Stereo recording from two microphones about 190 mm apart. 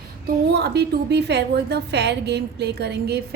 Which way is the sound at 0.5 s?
60° right (ahead or behind).